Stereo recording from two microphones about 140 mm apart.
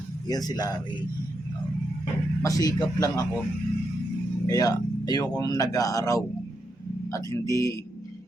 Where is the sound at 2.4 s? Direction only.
25° left (ahead or behind).